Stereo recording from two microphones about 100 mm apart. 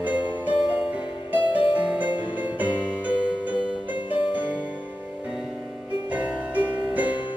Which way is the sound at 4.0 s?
55° left (ahead or behind).